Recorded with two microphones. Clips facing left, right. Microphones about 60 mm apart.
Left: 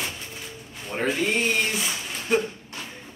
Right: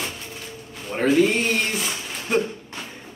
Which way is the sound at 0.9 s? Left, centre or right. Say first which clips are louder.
Right 6 dB; centre.